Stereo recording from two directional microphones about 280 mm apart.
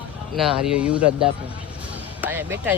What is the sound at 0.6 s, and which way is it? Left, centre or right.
Speech, centre.